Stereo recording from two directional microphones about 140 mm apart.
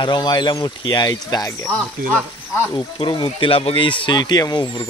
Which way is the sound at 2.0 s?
90° right.